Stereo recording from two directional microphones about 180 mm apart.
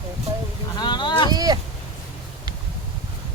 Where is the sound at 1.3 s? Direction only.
20° right (ahead or behind).